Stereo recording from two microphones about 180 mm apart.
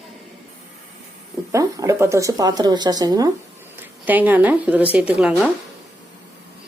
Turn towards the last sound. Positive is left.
turn(degrees=-5)  # may be behind; listen again after turning